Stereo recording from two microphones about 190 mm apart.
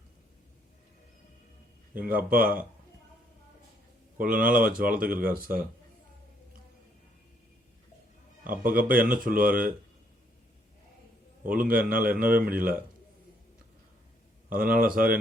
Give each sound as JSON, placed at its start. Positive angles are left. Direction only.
{"t": 2.0, "sound": "speech", "side_deg": -50}
{"t": 4.2, "sound": "speech", "side_deg": -45}
{"t": 8.4, "sound": "speech", "side_deg": -45}
{"t": 11.4, "sound": "speech", "side_deg": -45}
{"t": 14.5, "sound": "speech", "side_deg": -50}